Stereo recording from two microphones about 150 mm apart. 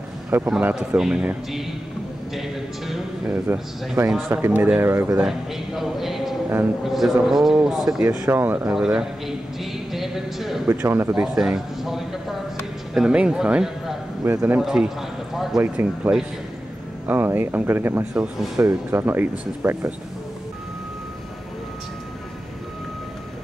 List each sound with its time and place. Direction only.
0.5 s speech: 5° right (ahead or behind)
3.3 s speech: 15° right (ahead or behind)
5.8 s speech: centre (ahead or behind)
8.1 s speech: 15° right (ahead or behind)
9.9 s a sound: centre (ahead or behind)
10.7 s speech: 15° right (ahead or behind)
11.3 s a sound: 5° right (ahead or behind)
12.9 s speech: 5° right (ahead or behind)
14.6 s basketball bounce: 5° right (ahead or behind)
15.6 s speech: 10° right (ahead or behind)